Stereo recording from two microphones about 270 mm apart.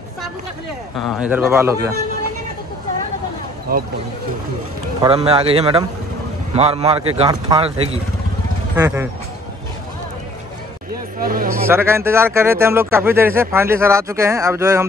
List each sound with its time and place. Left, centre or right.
0.9 s speech: centre
3.7 s speech: right
5.0 s speech: centre
8.7 s speech: centre
11.1 s speech: right
11.6 s speech: centre